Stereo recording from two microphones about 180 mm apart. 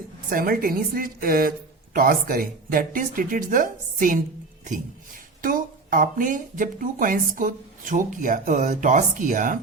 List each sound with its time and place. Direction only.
0.3 s speech: 55° right (ahead or behind)